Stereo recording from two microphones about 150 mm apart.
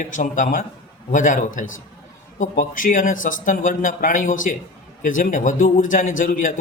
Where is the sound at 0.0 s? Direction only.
60° left (ahead or behind).